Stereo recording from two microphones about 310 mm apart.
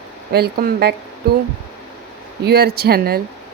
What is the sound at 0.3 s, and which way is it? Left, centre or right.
Speech, right.